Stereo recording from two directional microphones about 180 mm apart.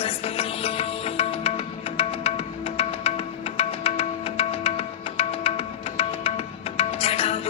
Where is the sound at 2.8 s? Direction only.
35° left (ahead or behind).